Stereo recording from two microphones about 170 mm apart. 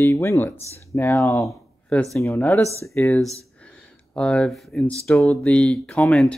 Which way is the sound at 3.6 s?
5° left (ahead or behind).